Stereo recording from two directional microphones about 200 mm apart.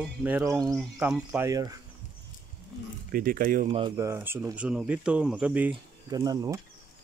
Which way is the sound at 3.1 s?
45° right (ahead or behind).